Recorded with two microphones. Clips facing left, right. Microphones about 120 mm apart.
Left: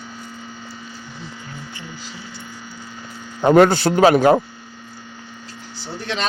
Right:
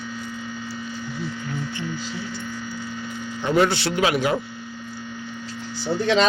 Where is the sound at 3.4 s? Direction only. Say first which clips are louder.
Left 8 dB; 50° left (ahead or behind).